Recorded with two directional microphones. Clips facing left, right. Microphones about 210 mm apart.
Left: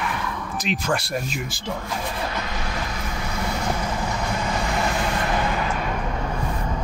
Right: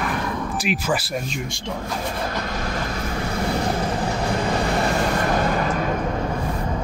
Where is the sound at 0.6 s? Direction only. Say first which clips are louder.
Even; 5° right (ahead or behind).